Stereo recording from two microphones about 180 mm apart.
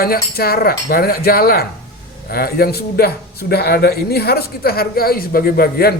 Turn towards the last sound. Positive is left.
turn(degrees=55)  # may be behind; listen again after turning